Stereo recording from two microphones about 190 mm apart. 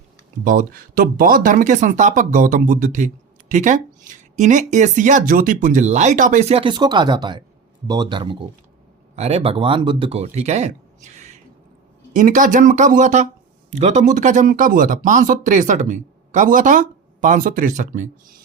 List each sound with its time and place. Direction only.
0.4 s speech: 50° right (ahead or behind)